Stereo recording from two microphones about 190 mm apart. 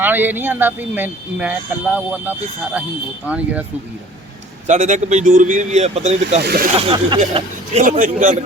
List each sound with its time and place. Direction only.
0.0 s speech: 10° right (ahead or behind)
4.6 s speech: 40° right (ahead or behind)
6.4 s speech: 55° right (ahead or behind)
6.7 s speech: 25° right (ahead or behind); by 8.4 s 45° right (ahead or behind)